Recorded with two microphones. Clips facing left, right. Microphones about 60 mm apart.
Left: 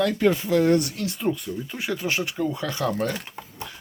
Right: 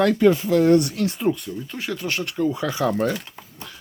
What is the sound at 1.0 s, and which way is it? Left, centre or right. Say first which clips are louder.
Speech: right 6 dB; right.